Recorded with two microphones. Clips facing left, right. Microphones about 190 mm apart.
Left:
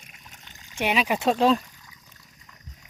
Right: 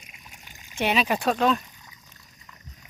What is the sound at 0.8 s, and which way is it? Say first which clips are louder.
Speech: even; 10° left (ahead or behind).